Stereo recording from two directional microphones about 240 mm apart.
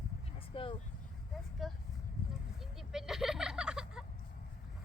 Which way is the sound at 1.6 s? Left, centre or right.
Centre.